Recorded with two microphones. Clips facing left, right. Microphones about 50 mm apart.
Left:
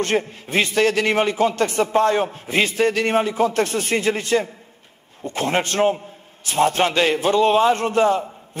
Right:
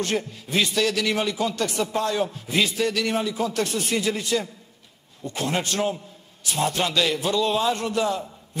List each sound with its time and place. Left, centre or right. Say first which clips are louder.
0.0 s a man's voice: left 5 dB; left